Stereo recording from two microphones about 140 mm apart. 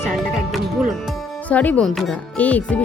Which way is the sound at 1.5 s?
10° left (ahead or behind).